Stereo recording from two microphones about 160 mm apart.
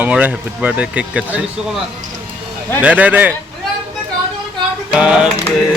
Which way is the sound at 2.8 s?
10° right (ahead or behind).